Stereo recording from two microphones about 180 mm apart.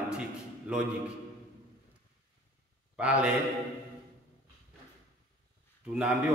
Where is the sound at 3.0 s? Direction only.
5° right (ahead or behind).